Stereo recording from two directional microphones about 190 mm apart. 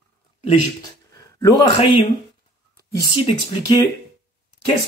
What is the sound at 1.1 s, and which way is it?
Speech, 20° left (ahead or behind).